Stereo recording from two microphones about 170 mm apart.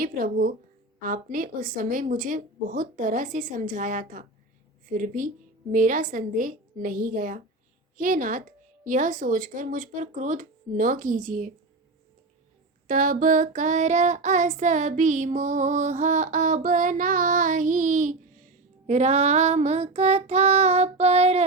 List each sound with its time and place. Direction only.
0.0 s speech: 55° right (ahead or behind)
1.0 s child singing: 55° right (ahead or behind)
12.9 s child singing: 50° right (ahead or behind)